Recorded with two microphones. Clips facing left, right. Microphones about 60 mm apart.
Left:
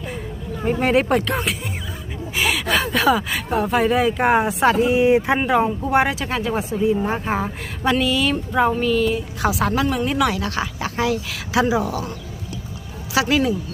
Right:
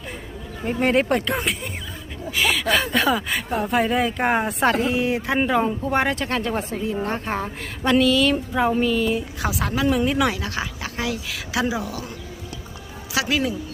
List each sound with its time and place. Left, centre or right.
0.6 s speech: centre
4.9 s speech: left
5.5 s speech: centre
13.1 s speech: centre